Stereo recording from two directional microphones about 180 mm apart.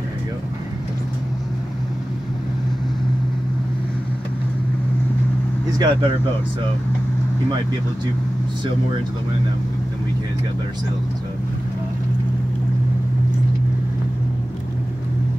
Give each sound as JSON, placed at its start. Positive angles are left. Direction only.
{"t": 5.8, "sound": "speech", "side_deg": -25}